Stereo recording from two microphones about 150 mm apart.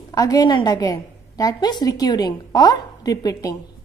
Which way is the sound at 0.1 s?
25° left (ahead or behind).